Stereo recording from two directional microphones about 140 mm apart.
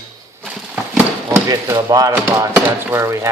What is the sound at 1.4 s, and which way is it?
Speech, 25° right (ahead or behind).